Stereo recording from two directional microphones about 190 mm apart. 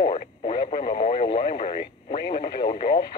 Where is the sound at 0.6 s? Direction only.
50° left (ahead or behind).